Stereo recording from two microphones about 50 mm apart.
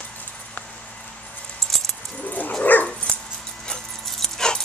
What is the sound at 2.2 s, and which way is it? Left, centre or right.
Bow-wow, left.